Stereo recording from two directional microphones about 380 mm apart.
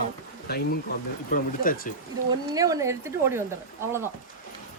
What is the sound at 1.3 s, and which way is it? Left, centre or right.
Speech, left.